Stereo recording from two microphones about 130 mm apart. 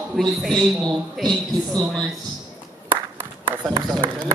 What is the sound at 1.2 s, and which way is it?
Speech, 30° right (ahead or behind).